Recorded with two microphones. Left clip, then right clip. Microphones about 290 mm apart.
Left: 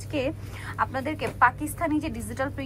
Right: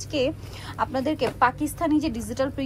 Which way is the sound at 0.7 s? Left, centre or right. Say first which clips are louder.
Right 3 dB; centre.